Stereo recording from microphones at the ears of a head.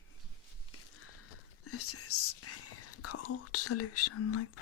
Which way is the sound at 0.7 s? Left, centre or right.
Left.